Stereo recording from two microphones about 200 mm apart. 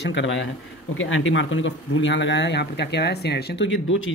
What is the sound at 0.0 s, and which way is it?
Speech, 65° left (ahead or behind).